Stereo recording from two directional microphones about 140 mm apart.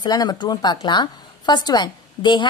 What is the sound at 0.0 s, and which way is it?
A woman's voice, 30° left (ahead or behind).